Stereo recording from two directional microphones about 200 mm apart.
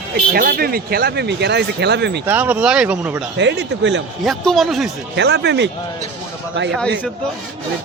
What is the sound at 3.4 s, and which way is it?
Speech, 60° right (ahead or behind).